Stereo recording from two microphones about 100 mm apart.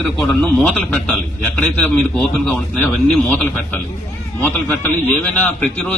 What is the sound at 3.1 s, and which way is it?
A man's voice, 10° left (ahead or behind).